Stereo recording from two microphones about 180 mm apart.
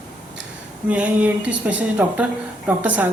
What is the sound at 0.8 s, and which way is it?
Speech, 10° right (ahead or behind).